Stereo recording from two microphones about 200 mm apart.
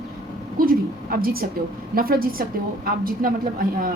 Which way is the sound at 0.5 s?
45° right (ahead or behind).